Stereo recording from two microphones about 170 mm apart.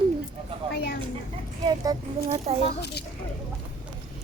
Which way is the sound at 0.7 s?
65° left (ahead or behind).